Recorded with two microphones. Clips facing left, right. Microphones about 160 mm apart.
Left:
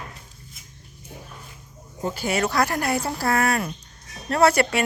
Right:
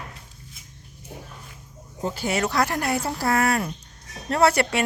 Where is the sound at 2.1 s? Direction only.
25° right (ahead or behind).